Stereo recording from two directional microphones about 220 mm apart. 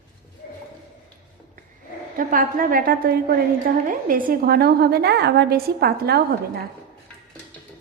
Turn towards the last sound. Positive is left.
turn(degrees=-45)  # may be behind; listen again after turning